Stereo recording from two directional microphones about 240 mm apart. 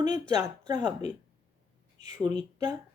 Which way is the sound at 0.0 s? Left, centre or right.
Centre.